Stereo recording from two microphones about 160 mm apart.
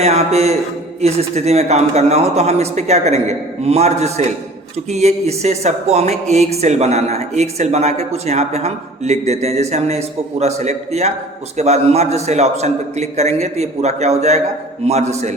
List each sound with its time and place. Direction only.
0.0 s a man's voice: 40° right (ahead or behind)